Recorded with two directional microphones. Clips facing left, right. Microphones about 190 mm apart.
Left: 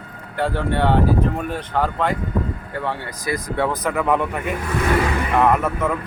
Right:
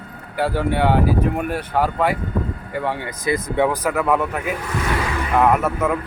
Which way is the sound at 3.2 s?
25° right (ahead or behind).